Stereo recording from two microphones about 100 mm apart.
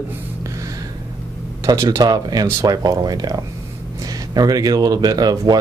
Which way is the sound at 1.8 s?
50° right (ahead or behind).